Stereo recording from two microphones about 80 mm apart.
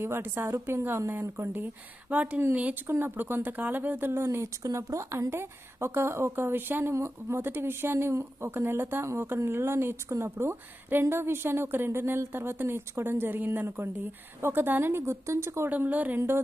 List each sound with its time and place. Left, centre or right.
0.0 s speech: right
15.7 s speech: right